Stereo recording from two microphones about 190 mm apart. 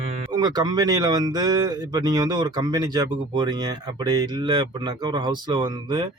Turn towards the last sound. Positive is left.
turn(degrees=-25)  # may be behind; listen again after turning